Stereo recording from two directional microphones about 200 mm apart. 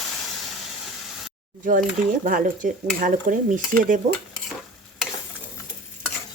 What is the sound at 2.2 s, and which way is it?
A woman's voice, 45° right (ahead or behind).